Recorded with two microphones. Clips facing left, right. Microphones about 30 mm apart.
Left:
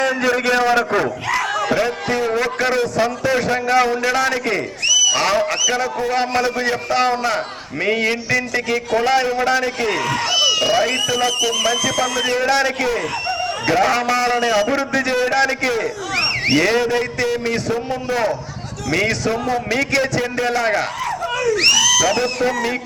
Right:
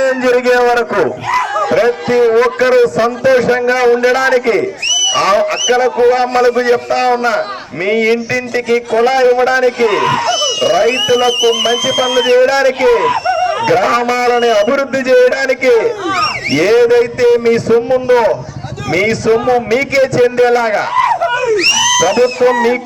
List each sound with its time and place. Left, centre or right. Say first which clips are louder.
0.0 s a man's voice: right 7 dB; centre
10.2 s a sound: right 3 dB; centre
10.7 s a man's voice: right 6 dB; centre
10.9 s a man's voice: right 7 dB; centre
12.8 s a man's voice: right 10 dB; right
13.7 s a man's voice: right 3 dB; centre
18.9 s a man's voice: right 6 dB; centre
19.3 s a man's voice: right 10 dB; right
19.7 s a man's voice: right 7 dB; centre
20.9 s speech: right 12 dB; right
21.2 s screaming: right 6 dB; centre
21.6 s speech: right 1 dB; centre
22.4 s a man's voice: right 9 dB; centre